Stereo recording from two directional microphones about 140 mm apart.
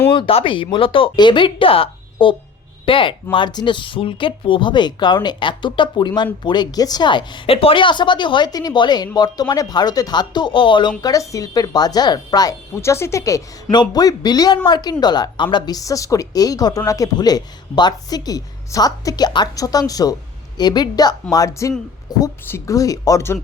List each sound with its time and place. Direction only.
0.1 s speech: 40° left (ahead or behind); by 23.4 s 20° left (ahead or behind)